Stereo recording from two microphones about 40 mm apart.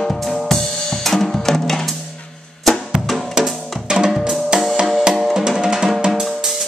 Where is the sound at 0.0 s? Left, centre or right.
Centre.